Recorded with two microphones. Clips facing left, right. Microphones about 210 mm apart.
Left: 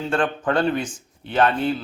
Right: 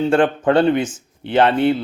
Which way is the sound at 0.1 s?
30° right (ahead or behind).